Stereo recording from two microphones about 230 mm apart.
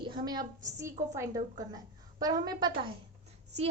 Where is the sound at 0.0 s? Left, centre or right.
Centre.